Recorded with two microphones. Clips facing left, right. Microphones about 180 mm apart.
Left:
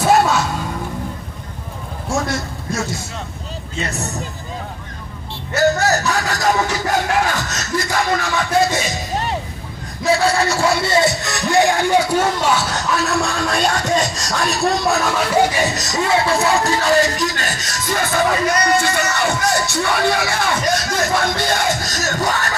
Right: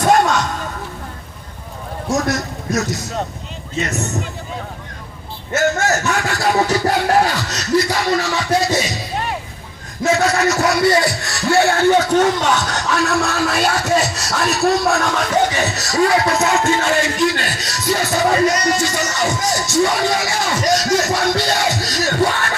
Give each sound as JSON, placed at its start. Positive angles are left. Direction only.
{"t": 0.0, "sound": "music", "side_deg": 5}
{"t": 2.0, "sound": "a man's voice", "side_deg": 25}
{"t": 5.5, "sound": "a sound", "side_deg": 35}
{"t": 6.6, "sound": "music", "side_deg": -35}
{"t": 7.3, "sound": "a sound", "side_deg": 50}
{"t": 10.1, "sound": "speech", "side_deg": 30}
{"t": 18.5, "sound": "music", "side_deg": 55}